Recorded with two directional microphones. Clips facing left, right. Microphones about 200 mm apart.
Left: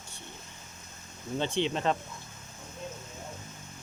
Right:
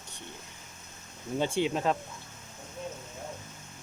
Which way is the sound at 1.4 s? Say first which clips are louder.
Right 1 dB; 10° right (ahead or behind).